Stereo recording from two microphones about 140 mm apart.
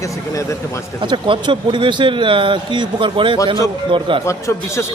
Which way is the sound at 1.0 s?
35° right (ahead or behind).